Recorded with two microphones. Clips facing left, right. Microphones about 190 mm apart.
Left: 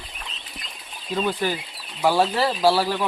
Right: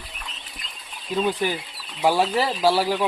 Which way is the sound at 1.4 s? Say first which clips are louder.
Even; 20° right (ahead or behind).